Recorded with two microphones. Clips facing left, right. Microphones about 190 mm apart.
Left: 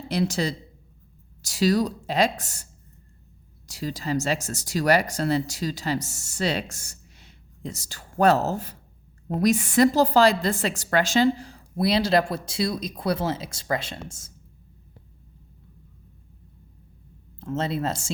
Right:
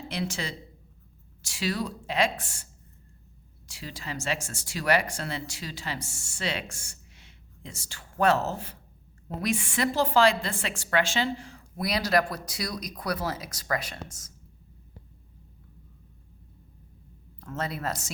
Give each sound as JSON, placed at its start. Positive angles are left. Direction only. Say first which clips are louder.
{"t": 0.1, "sound": "speech", "louder": "left 9 dB", "side_deg": 35}
{"t": 3.7, "sound": "a woman's voice", "louder": "left 10 dB", "side_deg": 40}
{"t": 17.4, "sound": "a woman's voice", "louder": "left 6 dB", "side_deg": 25}